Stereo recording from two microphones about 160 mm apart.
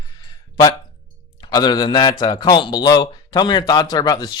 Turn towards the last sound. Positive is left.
turn(degrees=25)  # may be behind; listen again after turning